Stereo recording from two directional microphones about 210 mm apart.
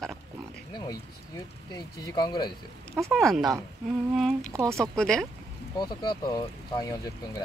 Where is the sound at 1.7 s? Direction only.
20° left (ahead or behind).